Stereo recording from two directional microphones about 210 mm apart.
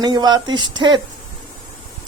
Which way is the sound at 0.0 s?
20° right (ahead or behind).